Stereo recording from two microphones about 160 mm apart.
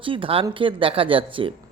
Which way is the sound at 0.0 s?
35° right (ahead or behind).